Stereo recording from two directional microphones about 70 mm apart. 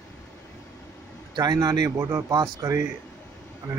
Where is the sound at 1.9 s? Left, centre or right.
Right.